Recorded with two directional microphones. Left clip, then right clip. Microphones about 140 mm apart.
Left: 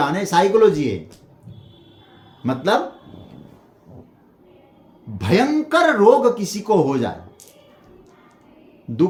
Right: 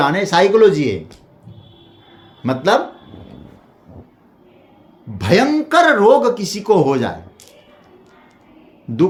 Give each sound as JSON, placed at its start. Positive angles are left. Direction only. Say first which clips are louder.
{"t": 0.0, "sound": "speech", "louder": "right 4 dB", "side_deg": -30}
{"t": 2.4, "sound": "speech", "louder": "right 4 dB", "side_deg": -35}
{"t": 5.1, "sound": "speech", "louder": "right 4 dB", "side_deg": -40}